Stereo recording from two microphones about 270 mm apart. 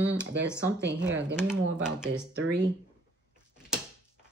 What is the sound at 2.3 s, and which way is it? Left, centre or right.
Speech, right.